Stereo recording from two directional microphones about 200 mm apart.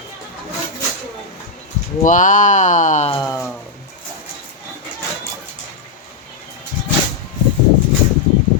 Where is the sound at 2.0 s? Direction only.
40° left (ahead or behind).